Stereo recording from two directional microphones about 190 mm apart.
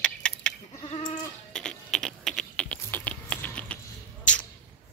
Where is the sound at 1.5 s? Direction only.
5° left (ahead or behind).